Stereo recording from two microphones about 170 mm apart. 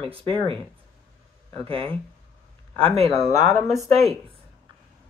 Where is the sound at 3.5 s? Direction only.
20° left (ahead or behind).